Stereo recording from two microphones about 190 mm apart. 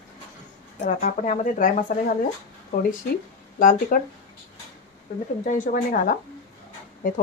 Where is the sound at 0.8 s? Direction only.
40° left (ahead or behind).